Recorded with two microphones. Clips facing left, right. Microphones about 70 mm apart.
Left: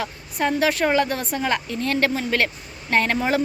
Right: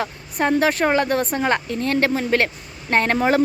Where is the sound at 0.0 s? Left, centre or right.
Right.